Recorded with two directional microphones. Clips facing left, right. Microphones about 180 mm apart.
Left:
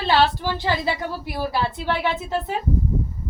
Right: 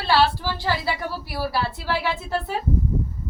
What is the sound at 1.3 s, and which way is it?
A woman's voice, 20° left (ahead or behind).